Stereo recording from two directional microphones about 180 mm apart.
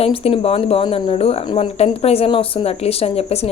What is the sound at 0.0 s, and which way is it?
A woman's voice, 35° left (ahead or behind).